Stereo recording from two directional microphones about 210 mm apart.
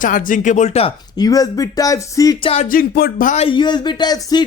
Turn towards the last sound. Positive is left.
turn(degrees=20)  # may be behind; listen again after turning